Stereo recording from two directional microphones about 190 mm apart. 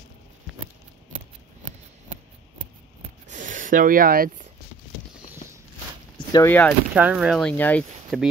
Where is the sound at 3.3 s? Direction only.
40° right (ahead or behind).